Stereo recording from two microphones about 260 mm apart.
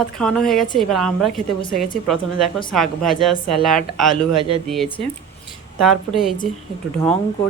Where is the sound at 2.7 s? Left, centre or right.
Centre.